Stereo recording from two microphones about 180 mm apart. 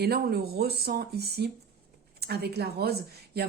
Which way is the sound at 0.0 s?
60° right (ahead or behind).